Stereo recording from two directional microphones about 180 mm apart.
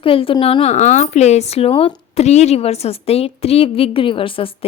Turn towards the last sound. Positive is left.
turn(degrees=30)  # may be behind; listen again after turning